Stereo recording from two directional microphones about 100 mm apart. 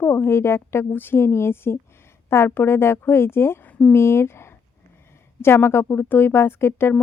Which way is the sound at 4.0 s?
25° left (ahead or behind).